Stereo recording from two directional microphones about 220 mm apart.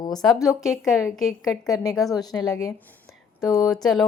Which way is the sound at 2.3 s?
Centre (ahead or behind).